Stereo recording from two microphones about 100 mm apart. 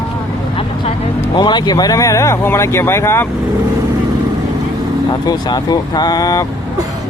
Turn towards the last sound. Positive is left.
turn(degrees=40)  # may be behind; listen again after turning